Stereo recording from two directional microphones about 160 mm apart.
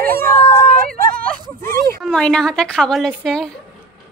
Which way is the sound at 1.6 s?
15° left (ahead or behind).